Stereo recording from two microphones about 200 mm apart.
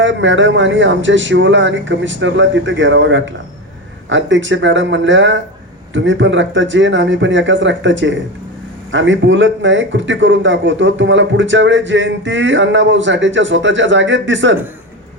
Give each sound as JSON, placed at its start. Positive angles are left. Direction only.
{"t": 0.0, "sound": "a man's voice", "side_deg": -65}